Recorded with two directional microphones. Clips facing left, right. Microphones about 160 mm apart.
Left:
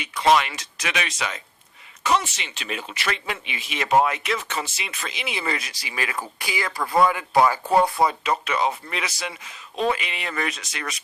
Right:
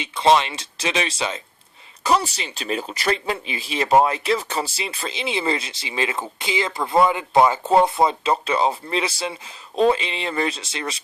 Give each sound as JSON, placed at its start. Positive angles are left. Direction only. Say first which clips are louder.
{"t": 0.0, "sound": "speech", "louder": "right 2 dB", "side_deg": -25}